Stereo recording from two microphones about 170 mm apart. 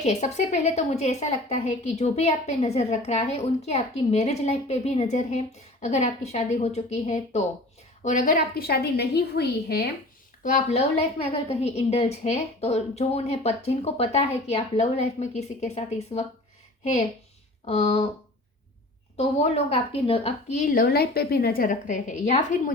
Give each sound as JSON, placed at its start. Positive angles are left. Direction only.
{"t": 0.0, "sound": "a woman's voice", "side_deg": 40}
{"t": 8.0, "sound": "a woman's voice", "side_deg": 50}
{"t": 10.4, "sound": "a woman's voice", "side_deg": 45}
{"t": 17.7, "sound": "a woman's voice", "side_deg": 40}
{"t": 19.1, "sound": "a woman's voice", "side_deg": 35}
{"t": 20.6, "sound": "a woman's voice", "side_deg": 55}